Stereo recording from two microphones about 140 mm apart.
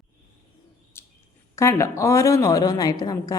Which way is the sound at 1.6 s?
20° left (ahead or behind).